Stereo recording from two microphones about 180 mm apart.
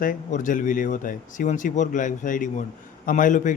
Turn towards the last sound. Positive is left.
turn(degrees=45)  # may be behind; listen again after turning